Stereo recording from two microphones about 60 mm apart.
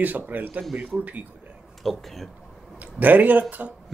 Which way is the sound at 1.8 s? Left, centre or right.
Centre.